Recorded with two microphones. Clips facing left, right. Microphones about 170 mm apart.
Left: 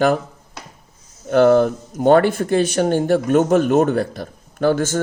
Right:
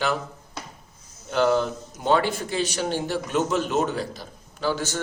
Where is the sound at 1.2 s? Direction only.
55° left (ahead or behind).